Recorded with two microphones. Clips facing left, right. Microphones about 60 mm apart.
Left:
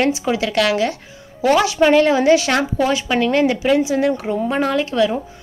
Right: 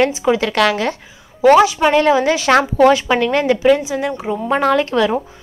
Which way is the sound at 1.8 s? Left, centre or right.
Centre.